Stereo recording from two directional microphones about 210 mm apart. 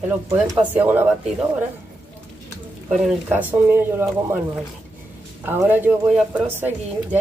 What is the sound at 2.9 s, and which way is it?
Speech, 5° right (ahead or behind).